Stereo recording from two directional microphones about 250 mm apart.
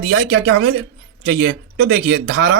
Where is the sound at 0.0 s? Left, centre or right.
Right.